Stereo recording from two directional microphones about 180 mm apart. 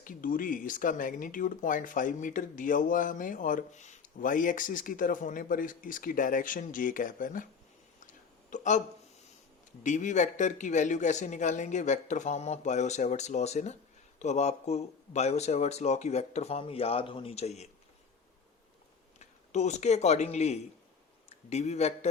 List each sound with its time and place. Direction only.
0.0 s speech: 50° left (ahead or behind)
8.4 s a sound: 45° left (ahead or behind)
9.8 s speech: 45° left (ahead or behind)
19.2 s speech: 40° left (ahead or behind)